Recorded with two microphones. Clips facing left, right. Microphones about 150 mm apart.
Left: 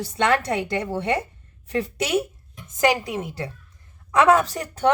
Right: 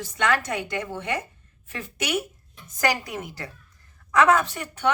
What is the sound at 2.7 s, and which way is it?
A woman's voice, 25° left (ahead or behind).